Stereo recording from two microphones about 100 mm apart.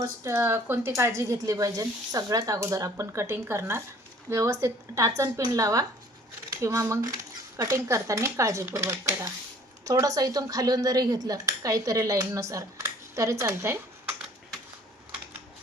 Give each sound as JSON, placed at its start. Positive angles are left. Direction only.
{"t": 0.0, "sound": "speech", "side_deg": -30}